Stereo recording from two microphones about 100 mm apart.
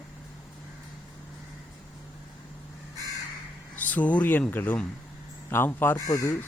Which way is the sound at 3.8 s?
15° left (ahead or behind).